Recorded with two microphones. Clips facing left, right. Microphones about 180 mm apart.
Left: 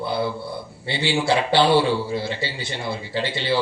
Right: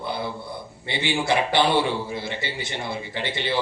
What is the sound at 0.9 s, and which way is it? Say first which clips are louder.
A man's voice: left 2 dB; 20° right (ahead or behind).